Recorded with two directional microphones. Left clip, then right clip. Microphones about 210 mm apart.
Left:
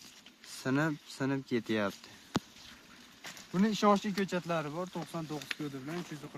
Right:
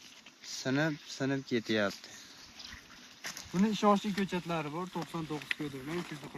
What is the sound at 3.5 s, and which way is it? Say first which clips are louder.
Speech: even; 30° left (ahead or behind).